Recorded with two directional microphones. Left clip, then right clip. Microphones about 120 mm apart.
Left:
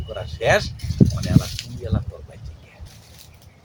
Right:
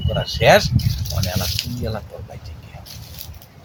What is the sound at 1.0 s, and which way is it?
Speech, centre (ahead or behind).